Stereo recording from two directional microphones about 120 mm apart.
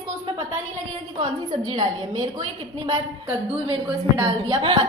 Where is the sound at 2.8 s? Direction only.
50° right (ahead or behind).